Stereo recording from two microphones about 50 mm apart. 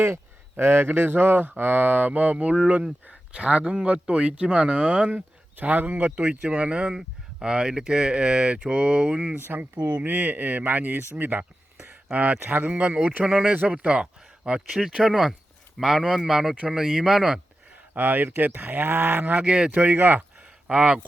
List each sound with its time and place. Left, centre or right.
0.0 s cattle: right
3.1 s speech: right
5.5 s speech: right
9.4 s cattle: right
12.1 s speech: right; by 17.4 s centre
17.9 s cattle: right
19.5 s speech: right
19.8 s cattle: right
20.7 s speech: right